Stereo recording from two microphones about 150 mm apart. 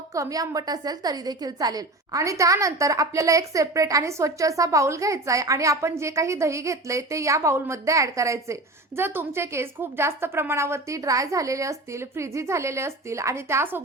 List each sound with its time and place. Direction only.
0.1 s a woman's voice: 20° right (ahead or behind)